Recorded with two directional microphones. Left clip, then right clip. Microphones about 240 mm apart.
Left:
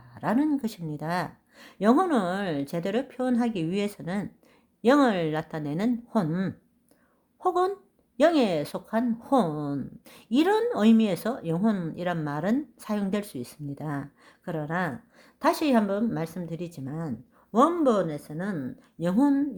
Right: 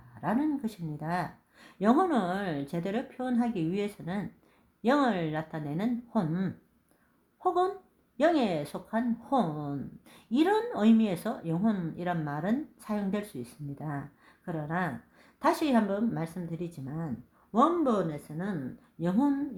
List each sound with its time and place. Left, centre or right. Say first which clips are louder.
0.1 s a woman's voice: left 4 dB; left